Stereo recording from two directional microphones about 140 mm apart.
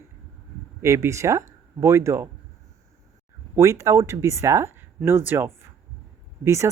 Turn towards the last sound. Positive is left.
turn(degrees=-20)  # may be behind; listen again after turning